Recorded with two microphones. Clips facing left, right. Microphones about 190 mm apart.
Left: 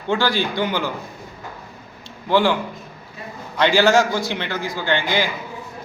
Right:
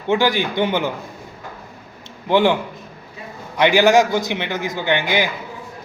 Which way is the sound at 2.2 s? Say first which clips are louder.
Right 2 dB; 20° right (ahead or behind).